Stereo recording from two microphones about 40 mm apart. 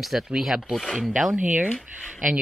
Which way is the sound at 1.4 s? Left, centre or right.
Right.